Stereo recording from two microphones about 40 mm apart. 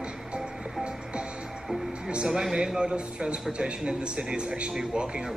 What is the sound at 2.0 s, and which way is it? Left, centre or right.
Speech, centre.